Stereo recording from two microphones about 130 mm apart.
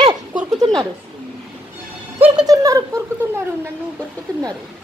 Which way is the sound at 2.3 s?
25° right (ahead or behind).